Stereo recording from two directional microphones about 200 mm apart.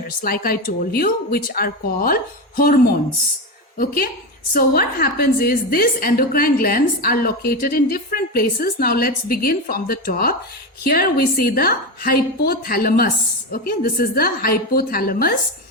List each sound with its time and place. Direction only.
0.2 s a woman's voice: 45° left (ahead or behind)
3.8 s a woman's voice: 45° left (ahead or behind)